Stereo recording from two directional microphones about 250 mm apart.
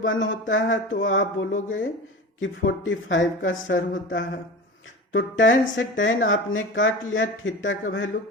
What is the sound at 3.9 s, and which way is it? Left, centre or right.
Speech, left.